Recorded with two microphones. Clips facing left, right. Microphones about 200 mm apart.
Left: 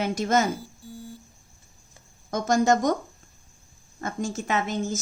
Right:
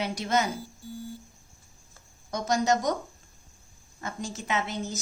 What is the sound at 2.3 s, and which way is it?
Speech, 50° left (ahead or behind).